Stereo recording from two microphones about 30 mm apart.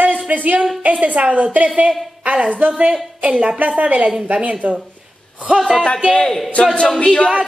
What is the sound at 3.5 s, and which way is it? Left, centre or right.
A woman's voice, right.